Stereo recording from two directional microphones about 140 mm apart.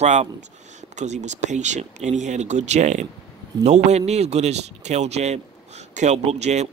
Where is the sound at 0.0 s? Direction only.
55° right (ahead or behind).